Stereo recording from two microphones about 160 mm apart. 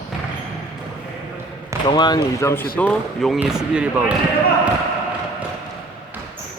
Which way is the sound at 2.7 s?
5° left (ahead or behind).